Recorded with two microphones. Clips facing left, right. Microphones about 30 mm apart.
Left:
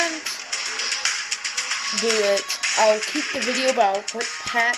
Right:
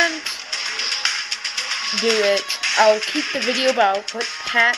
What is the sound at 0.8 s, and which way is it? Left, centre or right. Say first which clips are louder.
Music: right 2 dB; right.